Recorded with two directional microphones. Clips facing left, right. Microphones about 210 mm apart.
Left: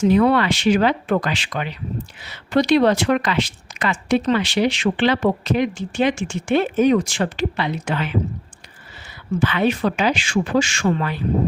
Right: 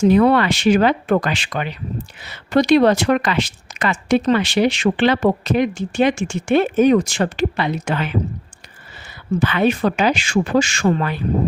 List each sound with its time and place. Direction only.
0.0 s speech: 45° right (ahead or behind)
9.4 s speech: 45° right (ahead or behind)